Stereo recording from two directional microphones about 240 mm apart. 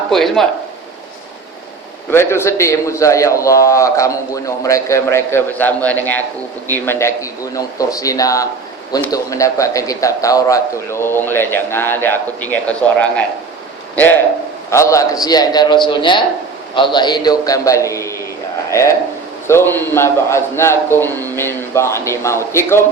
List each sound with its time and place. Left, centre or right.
0.1 s speech: centre
2.0 s a man's voice: centre